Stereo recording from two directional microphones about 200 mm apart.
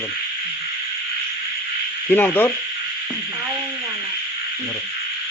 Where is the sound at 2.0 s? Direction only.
10° left (ahead or behind).